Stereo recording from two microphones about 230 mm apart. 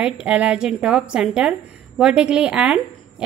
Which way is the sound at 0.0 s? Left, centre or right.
Centre.